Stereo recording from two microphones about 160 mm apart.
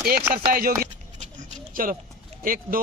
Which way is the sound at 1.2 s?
55° right (ahead or behind).